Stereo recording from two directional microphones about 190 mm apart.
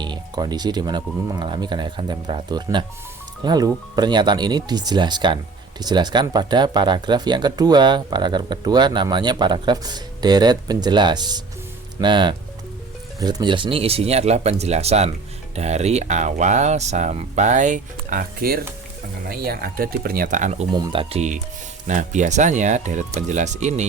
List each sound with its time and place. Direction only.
0.0 s speech: 20° right (ahead or behind); by 20.7 s 40° right (ahead or behind)
20.7 s speech: 25° right (ahead or behind)